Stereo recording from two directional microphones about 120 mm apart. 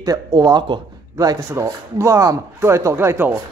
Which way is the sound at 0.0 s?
30° right (ahead or behind).